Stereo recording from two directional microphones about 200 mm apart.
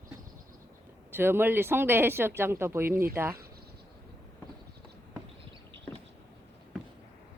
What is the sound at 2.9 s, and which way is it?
Speech, 45° right (ahead or behind).